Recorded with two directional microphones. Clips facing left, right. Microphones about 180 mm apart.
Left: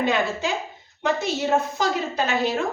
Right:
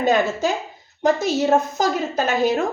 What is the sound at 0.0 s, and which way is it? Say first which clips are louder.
A woman's voice: right 4 dB; 40° right (ahead or behind).